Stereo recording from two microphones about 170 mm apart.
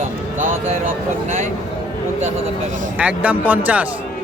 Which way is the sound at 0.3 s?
50° right (ahead or behind).